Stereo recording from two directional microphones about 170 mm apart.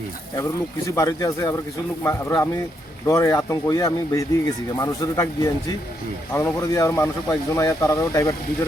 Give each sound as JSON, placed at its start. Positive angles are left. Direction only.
{"t": 0.9, "sound": "speech", "side_deg": 20}